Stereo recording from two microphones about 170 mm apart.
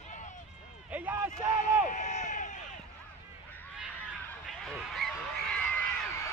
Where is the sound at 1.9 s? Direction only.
45° left (ahead or behind).